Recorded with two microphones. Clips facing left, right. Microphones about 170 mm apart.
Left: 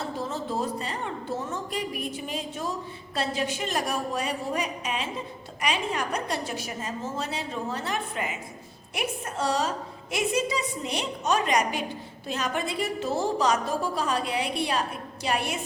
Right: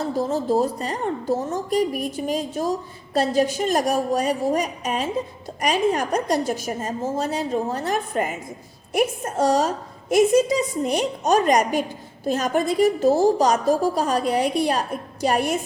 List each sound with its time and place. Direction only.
0.0 s a woman's voice: 40° right (ahead or behind)